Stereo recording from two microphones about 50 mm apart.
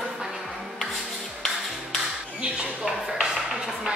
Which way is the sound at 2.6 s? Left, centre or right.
Centre.